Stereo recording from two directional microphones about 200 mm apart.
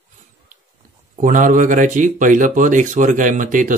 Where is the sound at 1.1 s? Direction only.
40° right (ahead or behind).